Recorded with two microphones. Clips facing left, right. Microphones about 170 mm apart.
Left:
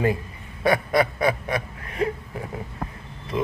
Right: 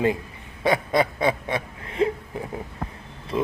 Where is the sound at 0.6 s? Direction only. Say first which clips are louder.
Left 1 dB; 20° right (ahead or behind).